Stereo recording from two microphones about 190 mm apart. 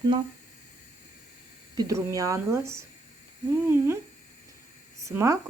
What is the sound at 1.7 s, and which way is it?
A woman's voice, 15° right (ahead or behind).